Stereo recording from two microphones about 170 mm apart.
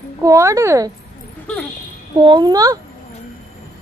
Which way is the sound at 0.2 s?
20° right (ahead or behind).